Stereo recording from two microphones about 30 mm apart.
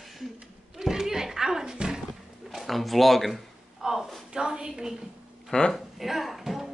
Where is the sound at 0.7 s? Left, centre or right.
Centre.